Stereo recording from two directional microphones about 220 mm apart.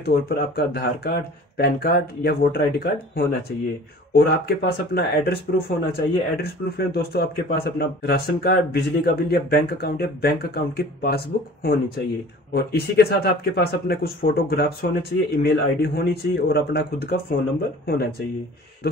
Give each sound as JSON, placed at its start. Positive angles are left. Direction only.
{"t": 0.0, "sound": "speech", "side_deg": 45}